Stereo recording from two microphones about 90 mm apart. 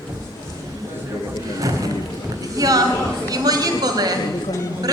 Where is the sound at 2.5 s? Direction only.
40° right (ahead or behind).